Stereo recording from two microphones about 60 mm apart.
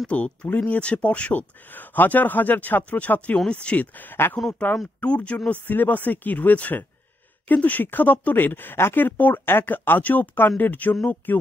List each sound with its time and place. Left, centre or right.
0.1 s speech: left
5.5 s speech: left